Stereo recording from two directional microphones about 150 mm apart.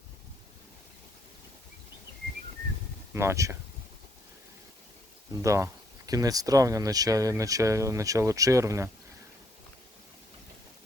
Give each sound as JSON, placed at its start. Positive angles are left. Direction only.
{"t": 3.1, "sound": "speech", "side_deg": -15}
{"t": 5.3, "sound": "speech", "side_deg": -20}